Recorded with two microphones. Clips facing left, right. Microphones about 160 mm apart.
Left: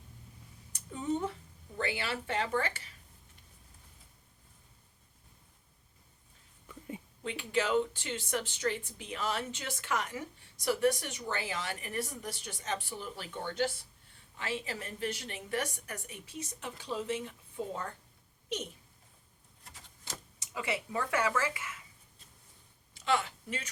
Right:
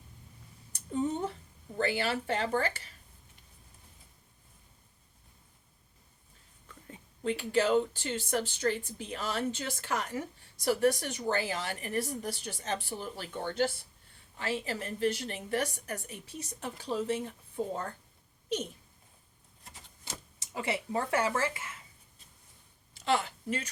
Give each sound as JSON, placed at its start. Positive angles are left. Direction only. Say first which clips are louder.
{"t": 0.7, "sound": "a sound", "louder": "right 2 dB", "side_deg": -35}
{"t": 1.8, "sound": "speech", "louder": "right 5 dB", "side_deg": -35}
{"t": 6.7, "sound": "a sound", "louder": "left 7 dB", "side_deg": 15}
{"t": 7.3, "sound": "speech", "louder": "right 4 dB", "side_deg": -35}
{"t": 20.4, "sound": "speech", "louder": "right 2 dB", "side_deg": -30}
{"t": 23.0, "sound": "speech", "louder": "right 2 dB", "side_deg": -35}